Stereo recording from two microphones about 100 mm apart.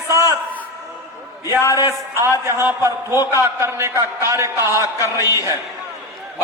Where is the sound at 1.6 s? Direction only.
30° left (ahead or behind).